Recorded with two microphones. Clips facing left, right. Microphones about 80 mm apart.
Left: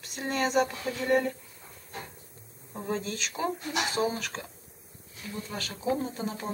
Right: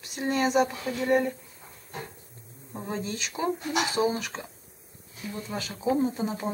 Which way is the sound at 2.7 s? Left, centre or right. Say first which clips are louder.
Even; centre.